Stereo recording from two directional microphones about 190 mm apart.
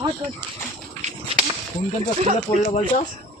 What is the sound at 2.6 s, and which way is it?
Speech, 35° left (ahead or behind).